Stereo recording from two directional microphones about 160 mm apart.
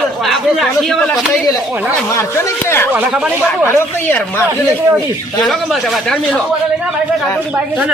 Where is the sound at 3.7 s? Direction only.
15° left (ahead or behind).